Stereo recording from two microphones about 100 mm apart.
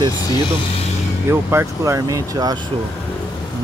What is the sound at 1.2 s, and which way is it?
Speech, 30° right (ahead or behind).